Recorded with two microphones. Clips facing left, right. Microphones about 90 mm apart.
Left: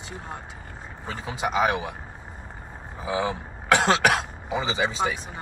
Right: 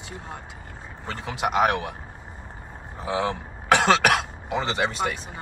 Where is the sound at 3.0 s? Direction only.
70° right (ahead or behind).